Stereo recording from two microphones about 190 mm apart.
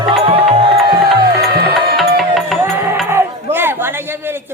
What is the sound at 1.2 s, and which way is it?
Music, 55° right (ahead or behind).